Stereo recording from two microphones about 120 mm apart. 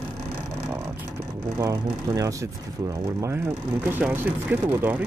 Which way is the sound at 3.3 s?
15° right (ahead or behind).